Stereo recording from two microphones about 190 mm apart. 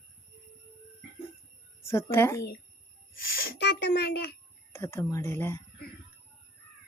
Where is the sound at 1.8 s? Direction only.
15° left (ahead or behind).